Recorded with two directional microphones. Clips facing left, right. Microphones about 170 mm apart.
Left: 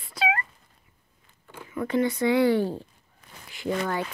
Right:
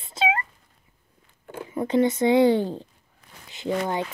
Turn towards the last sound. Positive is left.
turn(degrees=-20)  # may be behind; listen again after turning